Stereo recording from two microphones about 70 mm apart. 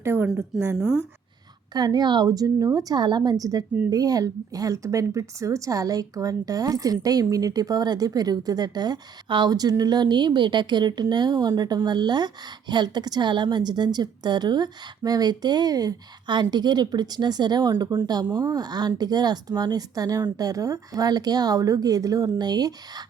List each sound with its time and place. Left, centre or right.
0.0 s a woman's voice: right
1.7 s speech: right